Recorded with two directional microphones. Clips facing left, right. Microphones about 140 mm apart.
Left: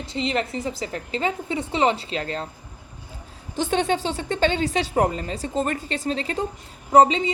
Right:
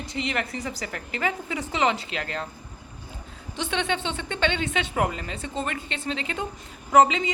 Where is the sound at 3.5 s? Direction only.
45° left (ahead or behind).